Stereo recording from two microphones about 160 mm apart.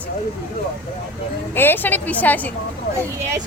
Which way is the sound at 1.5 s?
10° left (ahead or behind).